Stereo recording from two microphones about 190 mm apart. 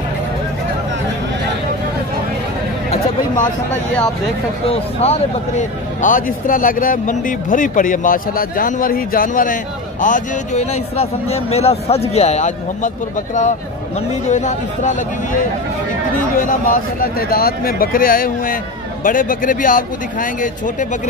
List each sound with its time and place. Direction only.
4.6 s speech: 30° left (ahead or behind)
16.3 s speech: 45° left (ahead or behind)